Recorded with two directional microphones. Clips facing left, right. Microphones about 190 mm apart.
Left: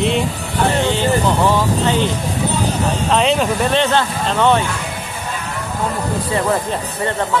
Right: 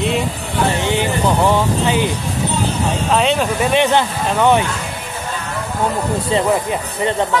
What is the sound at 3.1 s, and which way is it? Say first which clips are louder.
Speech: left 1 dB; centre (ahead or behind).